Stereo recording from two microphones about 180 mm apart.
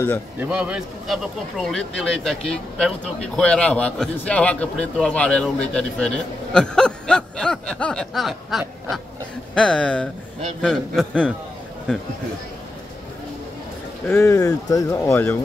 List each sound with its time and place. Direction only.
0.4 s a man's voice: 5° right (ahead or behind)
14.0 s speech: 15° left (ahead or behind)